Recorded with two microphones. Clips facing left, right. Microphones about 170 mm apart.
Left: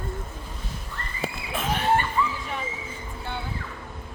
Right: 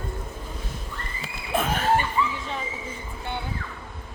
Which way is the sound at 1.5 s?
45° right (ahead or behind).